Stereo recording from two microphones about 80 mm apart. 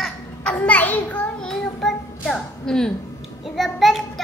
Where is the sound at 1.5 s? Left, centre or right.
Centre.